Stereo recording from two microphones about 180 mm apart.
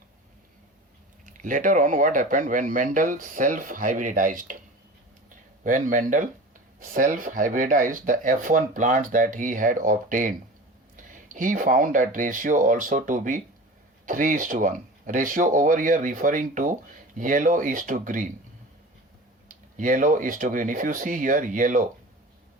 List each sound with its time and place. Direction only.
1.2 s speech: 45° right (ahead or behind)
5.6 s speech: 45° right (ahead or behind)
19.5 s speech: 45° right (ahead or behind)